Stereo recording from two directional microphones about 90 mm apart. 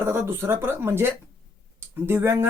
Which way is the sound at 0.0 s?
25° right (ahead or behind).